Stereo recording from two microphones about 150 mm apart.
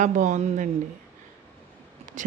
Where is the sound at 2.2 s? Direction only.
60° right (ahead or behind).